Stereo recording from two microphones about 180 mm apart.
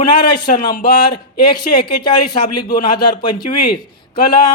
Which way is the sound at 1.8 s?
25° left (ahead or behind).